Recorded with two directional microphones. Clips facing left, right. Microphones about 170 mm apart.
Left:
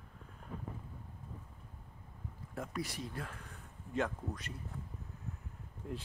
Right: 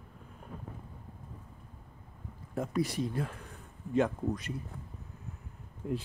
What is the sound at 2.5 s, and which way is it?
Speech, 25° right (ahead or behind).